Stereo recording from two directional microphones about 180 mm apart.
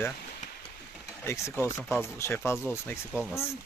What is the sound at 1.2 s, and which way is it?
Speech, 15° left (ahead or behind).